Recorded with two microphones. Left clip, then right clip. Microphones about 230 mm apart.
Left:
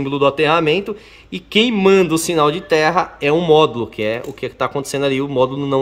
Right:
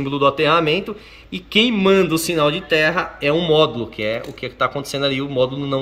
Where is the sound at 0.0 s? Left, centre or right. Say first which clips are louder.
Left 1 dB; centre.